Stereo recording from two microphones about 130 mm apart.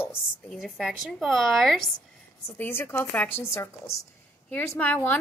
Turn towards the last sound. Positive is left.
turn(degrees=10)  # may be behind; listen again after turning